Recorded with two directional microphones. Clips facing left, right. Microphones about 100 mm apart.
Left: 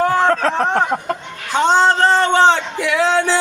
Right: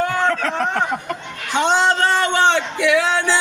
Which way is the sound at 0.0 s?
30° left (ahead or behind).